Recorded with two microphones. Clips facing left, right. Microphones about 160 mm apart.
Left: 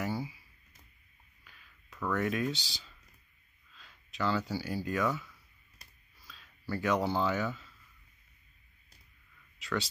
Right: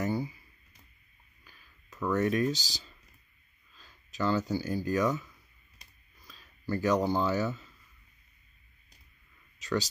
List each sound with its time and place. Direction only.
2.0 s speech: 35° right (ahead or behind)
6.2 s speech: 40° right (ahead or behind)
9.6 s speech: 40° right (ahead or behind)